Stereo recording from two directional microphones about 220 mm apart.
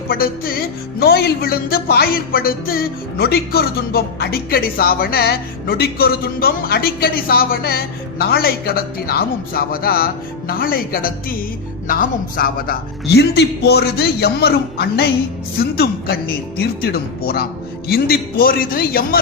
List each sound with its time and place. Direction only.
0.1 s speech: 45° left (ahead or behind)